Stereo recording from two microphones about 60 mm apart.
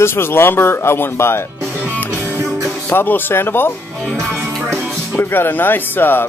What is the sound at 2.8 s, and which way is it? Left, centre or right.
Speech, left.